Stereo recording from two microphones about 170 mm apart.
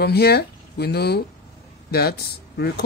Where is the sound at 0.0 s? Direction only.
70° left (ahead or behind).